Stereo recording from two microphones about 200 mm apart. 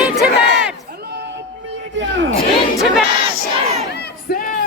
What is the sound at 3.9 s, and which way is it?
Crowd, 50° left (ahead or behind).